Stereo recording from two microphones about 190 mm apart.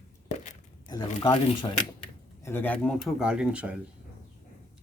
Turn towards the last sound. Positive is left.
turn(degrees=-5)  # may be behind; listen again after turning